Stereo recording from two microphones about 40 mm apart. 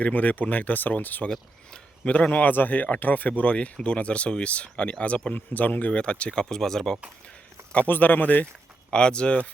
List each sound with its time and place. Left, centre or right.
0.0 s speech: left
2.0 s speech: left
2.4 s speech: left
5.3 s speech: left
5.9 s speech: left
6.4 s speech: centre
7.9 s speech: left
8.9 s speech: left